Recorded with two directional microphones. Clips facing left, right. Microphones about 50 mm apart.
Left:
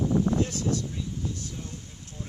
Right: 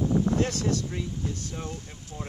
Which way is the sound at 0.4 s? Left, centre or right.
Right.